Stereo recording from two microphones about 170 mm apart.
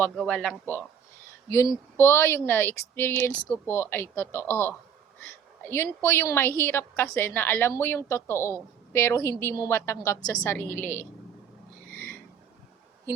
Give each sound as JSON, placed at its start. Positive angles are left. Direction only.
{"t": 0.0, "sound": "a man's voice", "side_deg": 5}
{"t": 1.5, "sound": "a woman's voice", "side_deg": 15}
{"t": 5.7, "sound": "a woman's voice", "side_deg": 15}